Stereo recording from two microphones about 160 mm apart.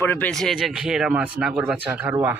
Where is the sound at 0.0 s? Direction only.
10° left (ahead or behind).